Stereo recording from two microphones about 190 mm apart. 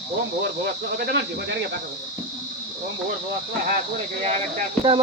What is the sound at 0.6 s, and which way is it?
Speech, 65° right (ahead or behind).